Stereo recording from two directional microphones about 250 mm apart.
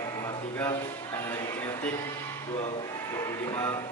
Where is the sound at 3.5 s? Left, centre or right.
Centre.